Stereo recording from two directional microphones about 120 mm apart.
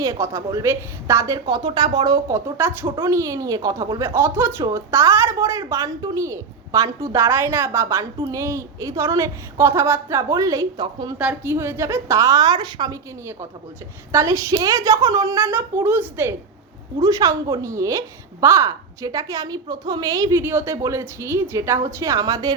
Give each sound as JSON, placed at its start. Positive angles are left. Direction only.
{"t": 0.0, "sound": "a woman's voice", "side_deg": -25}
{"t": 2.6, "sound": "a woman's voice", "side_deg": -20}
{"t": 11.2, "sound": "a woman's voice", "side_deg": -10}
{"t": 14.1, "sound": "a woman's voice", "side_deg": -25}
{"t": 17.0, "sound": "a woman's voice", "side_deg": -30}